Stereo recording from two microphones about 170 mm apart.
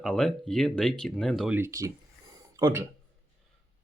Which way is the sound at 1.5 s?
15° right (ahead or behind).